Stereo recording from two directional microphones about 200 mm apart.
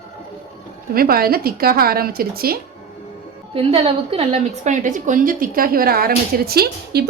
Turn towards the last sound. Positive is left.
turn(degrees=-50)  # may be behind; listen again after turning